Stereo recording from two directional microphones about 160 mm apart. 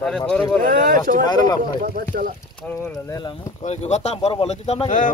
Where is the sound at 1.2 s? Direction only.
25° left (ahead or behind).